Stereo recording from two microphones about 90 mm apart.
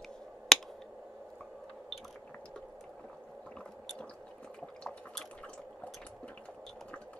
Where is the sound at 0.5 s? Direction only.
5° left (ahead or behind).